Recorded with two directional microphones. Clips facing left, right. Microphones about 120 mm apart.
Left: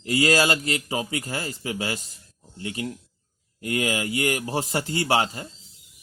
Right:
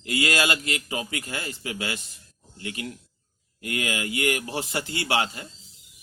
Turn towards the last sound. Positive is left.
turn(degrees=35)  # may be behind; listen again after turning